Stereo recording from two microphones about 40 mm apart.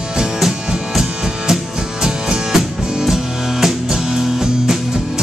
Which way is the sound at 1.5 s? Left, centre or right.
Centre.